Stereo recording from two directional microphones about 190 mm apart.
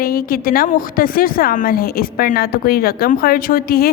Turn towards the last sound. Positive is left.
turn(degrees=50)  # may be behind; listen again after turning